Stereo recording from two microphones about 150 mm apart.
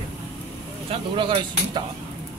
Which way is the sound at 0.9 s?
35° right (ahead or behind).